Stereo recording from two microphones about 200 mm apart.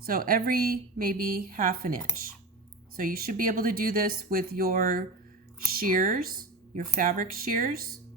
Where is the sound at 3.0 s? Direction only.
45° right (ahead or behind).